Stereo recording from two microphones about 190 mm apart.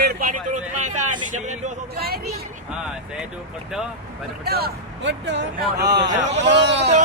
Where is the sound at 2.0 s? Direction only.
55° right (ahead or behind).